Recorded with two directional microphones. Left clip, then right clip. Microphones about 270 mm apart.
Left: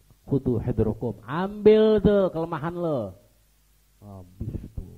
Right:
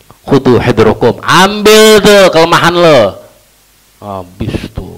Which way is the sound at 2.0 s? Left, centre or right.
Right.